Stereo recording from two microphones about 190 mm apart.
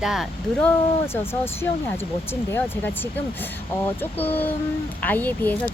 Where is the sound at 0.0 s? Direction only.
Centre (ahead or behind).